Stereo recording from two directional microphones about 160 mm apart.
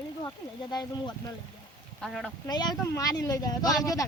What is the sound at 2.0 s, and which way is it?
Speech, centre (ahead or behind).